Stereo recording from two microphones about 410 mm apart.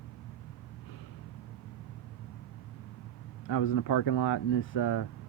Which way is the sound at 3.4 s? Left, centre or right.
Left.